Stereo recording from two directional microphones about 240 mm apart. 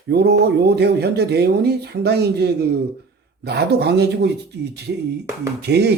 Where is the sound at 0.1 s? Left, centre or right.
Right.